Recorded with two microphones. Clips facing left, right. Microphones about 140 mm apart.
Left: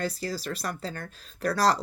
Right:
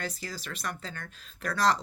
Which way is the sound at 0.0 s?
35° left (ahead or behind).